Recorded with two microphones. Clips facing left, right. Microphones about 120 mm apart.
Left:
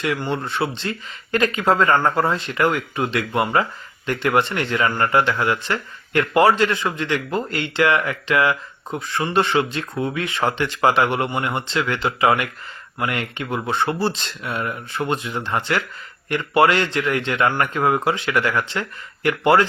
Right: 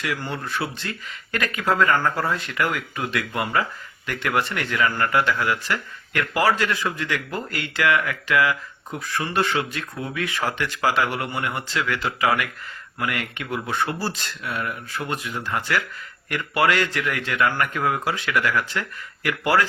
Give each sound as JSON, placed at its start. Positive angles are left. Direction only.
{"t": 0.0, "sound": "speech", "side_deg": 25}